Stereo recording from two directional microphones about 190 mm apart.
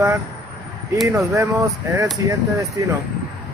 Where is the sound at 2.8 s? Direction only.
15° right (ahead or behind).